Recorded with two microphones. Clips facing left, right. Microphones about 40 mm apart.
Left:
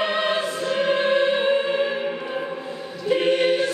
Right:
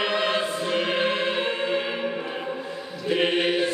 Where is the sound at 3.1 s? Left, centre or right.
Right.